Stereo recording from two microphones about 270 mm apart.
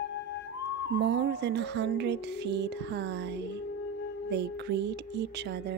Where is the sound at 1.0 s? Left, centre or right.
Right.